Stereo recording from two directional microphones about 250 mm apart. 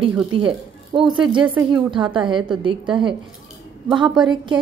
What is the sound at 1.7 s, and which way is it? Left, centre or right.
Speech, centre.